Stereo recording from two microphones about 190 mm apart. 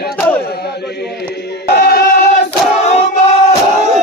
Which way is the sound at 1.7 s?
55° left (ahead or behind).